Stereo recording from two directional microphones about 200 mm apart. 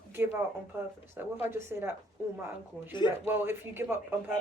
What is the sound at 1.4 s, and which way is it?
Speech, 10° right (ahead or behind).